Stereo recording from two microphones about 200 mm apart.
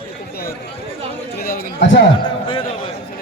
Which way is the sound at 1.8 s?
65° left (ahead or behind).